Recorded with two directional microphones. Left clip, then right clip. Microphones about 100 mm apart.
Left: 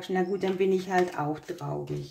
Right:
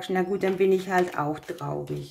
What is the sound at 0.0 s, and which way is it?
A woman's voice, 30° right (ahead or behind).